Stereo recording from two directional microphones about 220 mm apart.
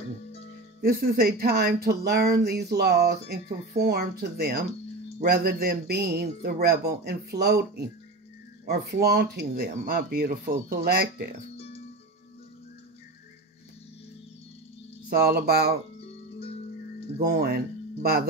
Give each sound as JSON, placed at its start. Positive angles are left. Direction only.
{"t": 0.7, "sound": "speech", "side_deg": -45}
{"t": 15.0, "sound": "speech", "side_deg": -45}
{"t": 16.0, "sound": "music", "side_deg": 25}
{"t": 17.2, "sound": "speech", "side_deg": -45}